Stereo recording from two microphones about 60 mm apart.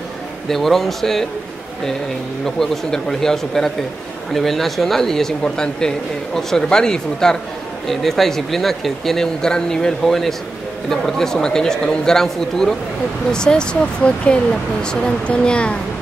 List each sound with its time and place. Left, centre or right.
0.5 s speech: centre
2.4 s speech: centre